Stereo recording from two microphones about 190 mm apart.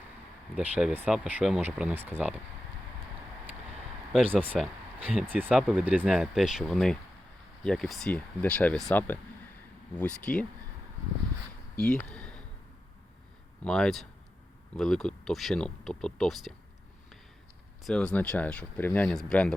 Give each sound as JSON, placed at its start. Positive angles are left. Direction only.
{"t": 0.5, "sound": "speech", "side_deg": -5}
{"t": 4.1, "sound": "speech", "side_deg": -10}
{"t": 11.8, "sound": "a sound", "side_deg": 5}
{"t": 13.7, "sound": "speech", "side_deg": 5}
{"t": 17.8, "sound": "speech", "side_deg": 5}